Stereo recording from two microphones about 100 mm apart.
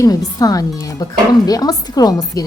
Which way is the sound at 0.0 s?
40° left (ahead or behind).